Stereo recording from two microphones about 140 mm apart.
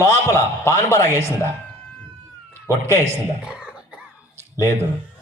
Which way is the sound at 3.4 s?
5° right (ahead or behind).